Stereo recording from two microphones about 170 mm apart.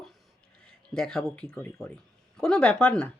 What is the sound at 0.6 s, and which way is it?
Speech, 5° left (ahead or behind).